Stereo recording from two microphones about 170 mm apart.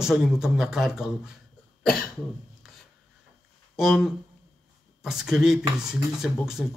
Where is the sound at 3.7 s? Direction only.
Centre (ahead or behind).